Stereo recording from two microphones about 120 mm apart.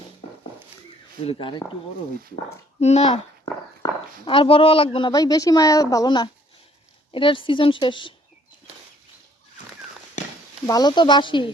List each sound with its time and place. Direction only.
1.2 s a woman's voice: 50° left (ahead or behind)
2.8 s a child's voice: 60° left (ahead or behind)
3.8 s a sound: 35° left (ahead or behind)
4.3 s a woman's voice: 50° left (ahead or behind)
5.1 s a woman's voice: 30° left (ahead or behind)
10.7 s speech: 35° left (ahead or behind)